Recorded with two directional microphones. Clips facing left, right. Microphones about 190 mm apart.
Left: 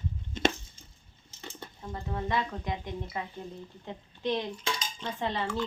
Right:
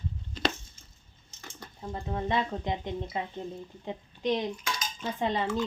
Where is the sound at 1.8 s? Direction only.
20° right (ahead or behind).